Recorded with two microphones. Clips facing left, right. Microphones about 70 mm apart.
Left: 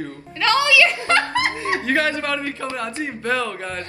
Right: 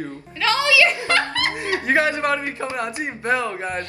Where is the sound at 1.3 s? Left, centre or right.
Left.